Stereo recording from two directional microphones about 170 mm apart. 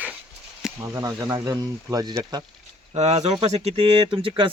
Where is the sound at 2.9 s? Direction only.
40° right (ahead or behind).